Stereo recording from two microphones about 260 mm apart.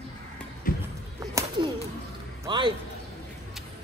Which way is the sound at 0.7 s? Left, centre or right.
Left.